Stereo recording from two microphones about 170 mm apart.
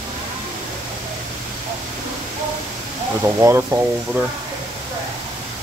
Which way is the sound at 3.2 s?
15° right (ahead or behind).